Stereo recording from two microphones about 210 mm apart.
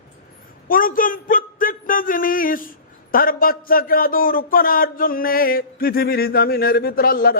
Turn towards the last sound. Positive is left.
turn(degrees=45)  # may be behind; listen again after turning